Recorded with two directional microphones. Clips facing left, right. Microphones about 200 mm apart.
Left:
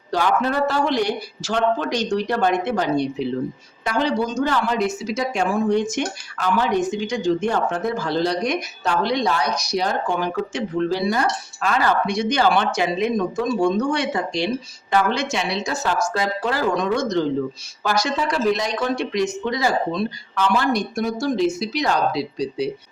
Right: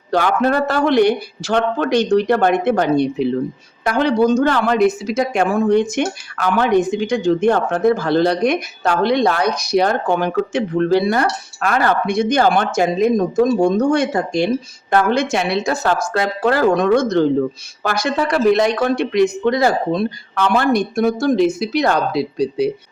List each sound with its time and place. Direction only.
0.1 s speech: 60° right (ahead or behind)